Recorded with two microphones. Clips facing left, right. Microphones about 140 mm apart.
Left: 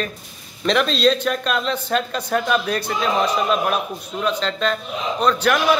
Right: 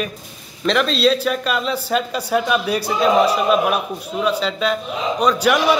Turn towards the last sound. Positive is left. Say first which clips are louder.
# right 2 dB
turn(degrees=-10)  # may be behind; listen again after turning